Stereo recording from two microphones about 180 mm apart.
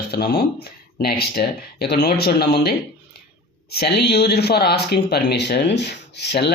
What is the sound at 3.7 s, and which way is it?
Speech, 65° left (ahead or behind).